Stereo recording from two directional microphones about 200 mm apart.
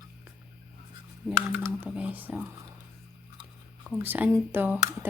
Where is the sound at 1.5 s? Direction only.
10° right (ahead or behind).